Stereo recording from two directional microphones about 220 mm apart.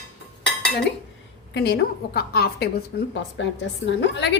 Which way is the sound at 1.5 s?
45° left (ahead or behind).